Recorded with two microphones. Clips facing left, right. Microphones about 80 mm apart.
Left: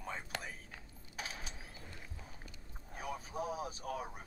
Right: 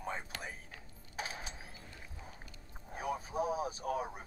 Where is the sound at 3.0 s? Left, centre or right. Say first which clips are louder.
Right 5 dB; right.